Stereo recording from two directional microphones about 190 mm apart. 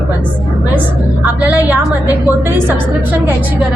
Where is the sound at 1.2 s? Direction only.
10° right (ahead or behind).